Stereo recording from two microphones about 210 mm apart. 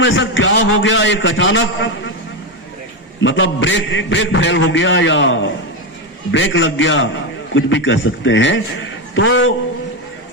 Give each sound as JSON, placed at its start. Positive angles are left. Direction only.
{"t": 0.0, "sound": "a man's voice", "side_deg": 60}
{"t": 3.2, "sound": "a man's voice", "side_deg": 65}